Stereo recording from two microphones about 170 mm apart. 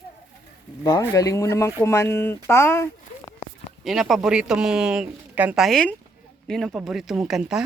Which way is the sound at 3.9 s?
Centre (ahead or behind).